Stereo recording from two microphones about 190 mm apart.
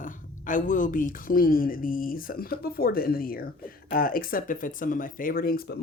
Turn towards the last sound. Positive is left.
turn(degrees=55)  # may be behind; listen again after turning